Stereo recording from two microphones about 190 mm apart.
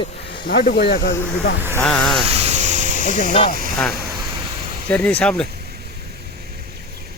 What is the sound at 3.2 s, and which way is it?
Speech, 40° left (ahead or behind).